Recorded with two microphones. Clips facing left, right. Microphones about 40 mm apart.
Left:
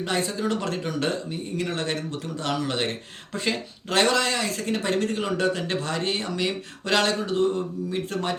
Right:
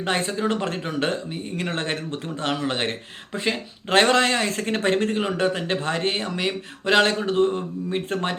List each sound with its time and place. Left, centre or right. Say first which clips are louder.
0.0 s a man's voice: right 2 dB; right
3.3 s speech: right 2 dB; centre
3.8 s a man's voice: right 4 dB; right